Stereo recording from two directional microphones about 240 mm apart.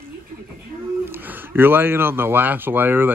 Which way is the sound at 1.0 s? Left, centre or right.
Centre.